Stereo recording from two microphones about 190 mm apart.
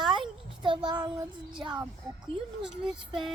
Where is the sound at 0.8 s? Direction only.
25° right (ahead or behind).